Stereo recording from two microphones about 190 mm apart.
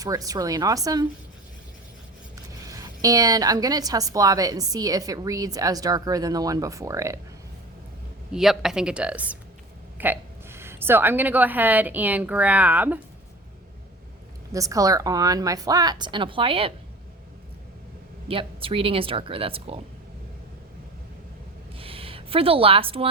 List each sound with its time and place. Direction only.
0.0 s a woman's voice: 20° right (ahead or behind)
2.3 s a woman's voice: 15° right (ahead or behind)
8.3 s a woman's voice: centre (ahead or behind)
14.5 s a woman's voice: 15° right (ahead or behind)
18.3 s a woman's voice: 30° right (ahead or behind)
21.8 s a sound: 30° right (ahead or behind)